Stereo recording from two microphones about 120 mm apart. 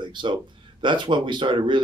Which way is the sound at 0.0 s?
40° right (ahead or behind).